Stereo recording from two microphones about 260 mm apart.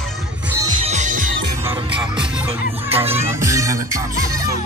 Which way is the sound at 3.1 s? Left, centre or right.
Centre.